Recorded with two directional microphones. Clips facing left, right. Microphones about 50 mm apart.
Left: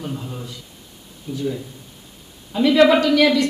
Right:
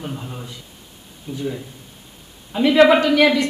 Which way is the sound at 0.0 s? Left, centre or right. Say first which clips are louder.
Left 1 dB; centre.